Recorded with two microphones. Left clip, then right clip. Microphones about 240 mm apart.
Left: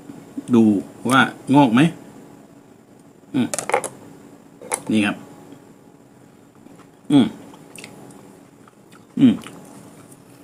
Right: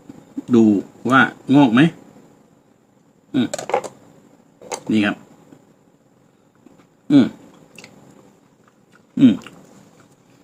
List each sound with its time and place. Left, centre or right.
0.5 s speech: centre
3.3 s speech: centre
3.7 s typing: centre
4.7 s a sound: centre
9.1 s speech: centre